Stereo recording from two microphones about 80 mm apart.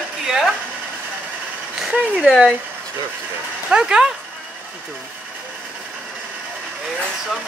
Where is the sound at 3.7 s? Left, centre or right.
Centre.